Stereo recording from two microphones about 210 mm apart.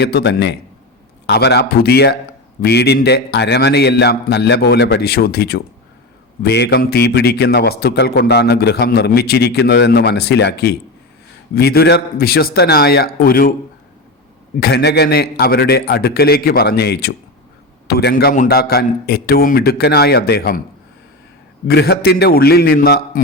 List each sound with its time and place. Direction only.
0.0 s a man's voice: 50° left (ahead or behind)
14.6 s a man's voice: 50° left (ahead or behind)
21.7 s a man's voice: 50° left (ahead or behind)